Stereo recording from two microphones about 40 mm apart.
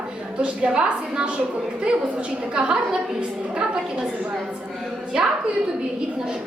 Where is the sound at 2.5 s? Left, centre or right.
Right.